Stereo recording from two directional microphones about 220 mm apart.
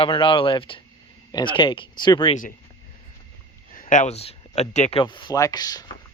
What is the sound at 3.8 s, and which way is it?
Speech, 35° left (ahead or behind).